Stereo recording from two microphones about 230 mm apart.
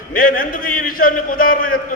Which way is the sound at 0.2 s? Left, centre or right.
Left.